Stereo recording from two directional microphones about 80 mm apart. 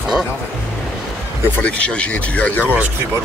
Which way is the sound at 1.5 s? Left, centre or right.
Centre.